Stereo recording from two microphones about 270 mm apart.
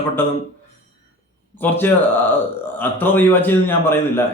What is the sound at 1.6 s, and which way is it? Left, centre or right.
A man's voice, centre.